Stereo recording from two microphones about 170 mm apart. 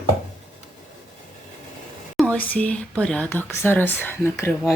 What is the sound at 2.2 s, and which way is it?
Speech, 5° left (ahead or behind).